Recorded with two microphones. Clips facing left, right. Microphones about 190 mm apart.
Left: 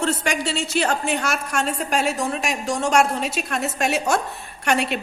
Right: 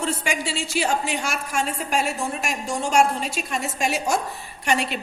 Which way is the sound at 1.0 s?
60° left (ahead or behind).